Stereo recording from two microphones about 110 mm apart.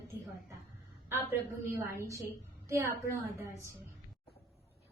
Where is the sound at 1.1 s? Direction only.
20° right (ahead or behind).